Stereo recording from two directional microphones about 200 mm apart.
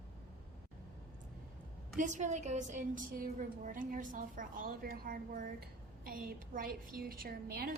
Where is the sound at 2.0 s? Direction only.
35° right (ahead or behind).